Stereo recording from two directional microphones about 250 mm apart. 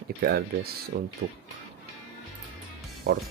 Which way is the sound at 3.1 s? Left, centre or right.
Right.